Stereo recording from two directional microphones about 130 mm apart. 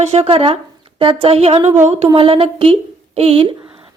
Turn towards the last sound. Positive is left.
turn(degrees=-45)  # may be behind; listen again after turning